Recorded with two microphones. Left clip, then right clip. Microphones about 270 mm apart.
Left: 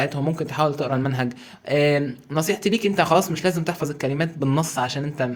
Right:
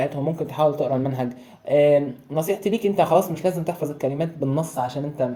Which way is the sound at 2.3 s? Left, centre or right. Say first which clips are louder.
Even; left.